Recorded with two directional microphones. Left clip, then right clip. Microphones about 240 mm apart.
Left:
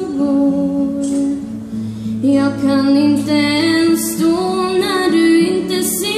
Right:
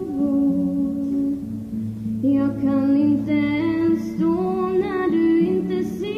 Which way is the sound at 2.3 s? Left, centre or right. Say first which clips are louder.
Left 7 dB; left.